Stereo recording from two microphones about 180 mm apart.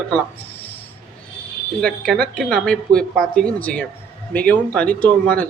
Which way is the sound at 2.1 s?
5° left (ahead or behind).